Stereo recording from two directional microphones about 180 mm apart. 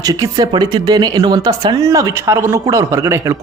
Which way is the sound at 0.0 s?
20° right (ahead or behind).